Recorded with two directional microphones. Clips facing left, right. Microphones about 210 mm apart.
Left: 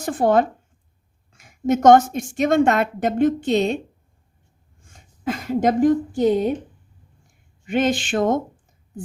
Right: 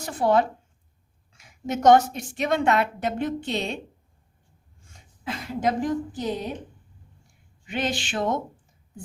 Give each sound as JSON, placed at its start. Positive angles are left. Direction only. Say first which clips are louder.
{"t": 0.0, "sound": "a woman's voice", "louder": "left 4 dB", "side_deg": 50}
{"t": 4.8, "sound": "a woman's voice", "louder": "left 11 dB", "side_deg": 50}
{"t": 7.6, "sound": "a woman's voice", "louder": "left 8 dB", "side_deg": 50}